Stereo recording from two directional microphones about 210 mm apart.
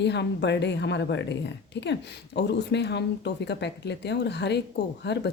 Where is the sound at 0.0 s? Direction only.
55° left (ahead or behind).